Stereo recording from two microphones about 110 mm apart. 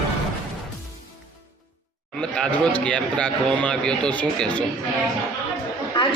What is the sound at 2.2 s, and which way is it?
Speech, 10° left (ahead or behind).